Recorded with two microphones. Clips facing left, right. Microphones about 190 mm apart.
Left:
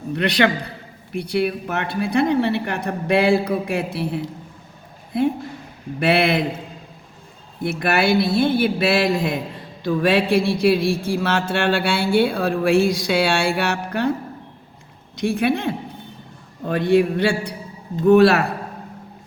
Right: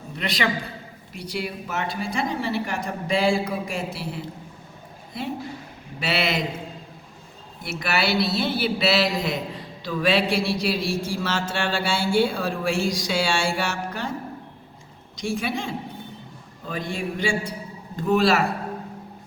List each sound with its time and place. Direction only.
0.2 s a man's voice: 65° left (ahead or behind)
6.0 s a man's voice: 55° left (ahead or behind)
7.6 s a man's voice: 55° left (ahead or behind)
15.1 s a man's voice: 60° left (ahead or behind)